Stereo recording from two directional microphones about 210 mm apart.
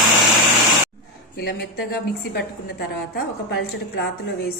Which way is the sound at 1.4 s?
50° left (ahead or behind).